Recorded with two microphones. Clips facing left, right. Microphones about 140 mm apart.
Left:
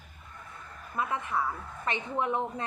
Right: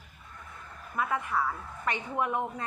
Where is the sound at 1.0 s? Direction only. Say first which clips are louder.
Right 1 dB; 25° left (ahead or behind).